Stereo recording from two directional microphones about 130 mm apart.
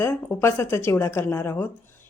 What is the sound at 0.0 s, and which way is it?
A woman's voice, 20° left (ahead or behind).